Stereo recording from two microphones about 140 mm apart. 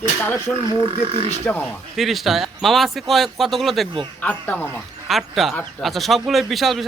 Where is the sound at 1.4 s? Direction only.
10° left (ahead or behind).